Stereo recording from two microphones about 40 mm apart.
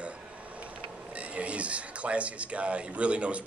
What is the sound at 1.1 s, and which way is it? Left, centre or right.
Speech, right.